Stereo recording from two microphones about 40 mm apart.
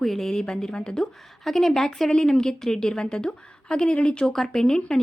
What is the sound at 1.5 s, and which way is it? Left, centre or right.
Speech, centre.